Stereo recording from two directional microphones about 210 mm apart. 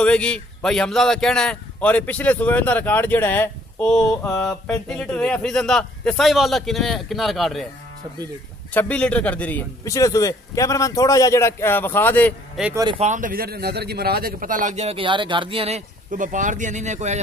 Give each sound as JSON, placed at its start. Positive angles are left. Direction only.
{"t": 0.0, "sound": "a man's voice", "side_deg": 5}
{"t": 4.4, "sound": "a man's voice", "side_deg": 0}
{"t": 8.7, "sound": "a man's voice", "side_deg": 5}
{"t": 13.0, "sound": "a man's voice", "side_deg": -40}